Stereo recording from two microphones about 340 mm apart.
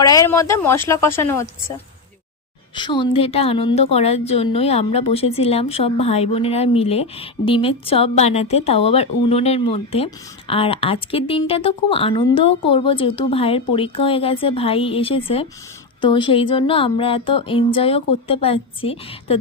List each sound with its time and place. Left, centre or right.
0.0 s a woman's voice: centre
2.7 s a woman's voice: centre